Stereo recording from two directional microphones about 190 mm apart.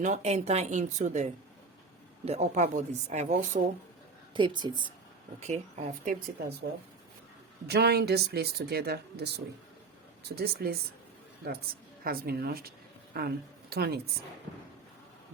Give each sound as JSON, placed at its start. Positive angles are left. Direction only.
{"t": 0.0, "sound": "speech", "side_deg": -35}
{"t": 4.4, "sound": "speech", "side_deg": -25}
{"t": 5.4, "sound": "speech", "side_deg": -35}
{"t": 7.7, "sound": "speech", "side_deg": -60}
{"t": 12.0, "sound": "speech", "side_deg": -50}